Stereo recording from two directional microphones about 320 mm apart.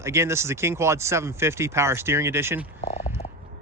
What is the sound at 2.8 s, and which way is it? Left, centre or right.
Speech, left.